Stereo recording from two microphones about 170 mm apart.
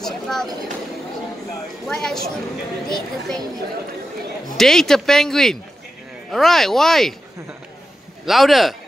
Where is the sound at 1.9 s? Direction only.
5° left (ahead or behind).